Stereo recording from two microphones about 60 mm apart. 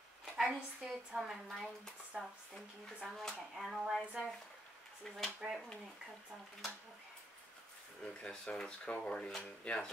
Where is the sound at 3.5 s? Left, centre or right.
Centre.